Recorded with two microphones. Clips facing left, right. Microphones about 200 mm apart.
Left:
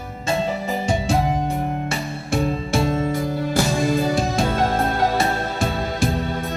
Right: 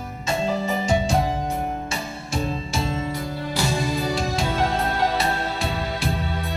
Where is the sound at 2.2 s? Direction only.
55° left (ahead or behind).